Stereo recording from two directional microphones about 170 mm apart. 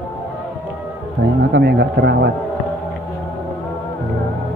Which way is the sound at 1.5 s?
75° right (ahead or behind).